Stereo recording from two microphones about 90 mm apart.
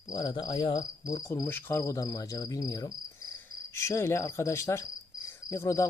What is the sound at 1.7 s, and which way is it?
Speech, 35° left (ahead or behind).